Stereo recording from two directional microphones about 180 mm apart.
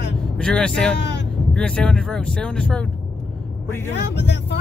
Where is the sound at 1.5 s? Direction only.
5° left (ahead or behind).